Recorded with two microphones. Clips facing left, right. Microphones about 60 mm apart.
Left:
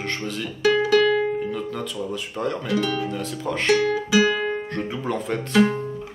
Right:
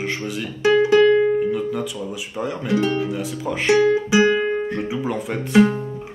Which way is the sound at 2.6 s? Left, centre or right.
Right.